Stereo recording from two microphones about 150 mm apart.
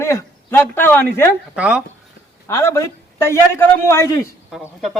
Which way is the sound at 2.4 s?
15° left (ahead or behind).